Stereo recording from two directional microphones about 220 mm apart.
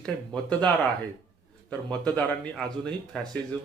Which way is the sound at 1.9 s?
5° left (ahead or behind).